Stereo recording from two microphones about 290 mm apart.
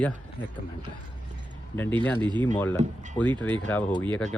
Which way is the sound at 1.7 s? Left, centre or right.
Centre.